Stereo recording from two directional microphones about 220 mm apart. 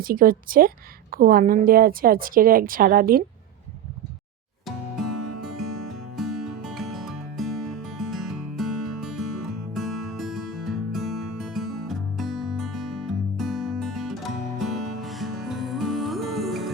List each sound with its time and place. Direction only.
0.0 s a woman's voice: 40° right (ahead or behind)
4.6 s music: centre (ahead or behind)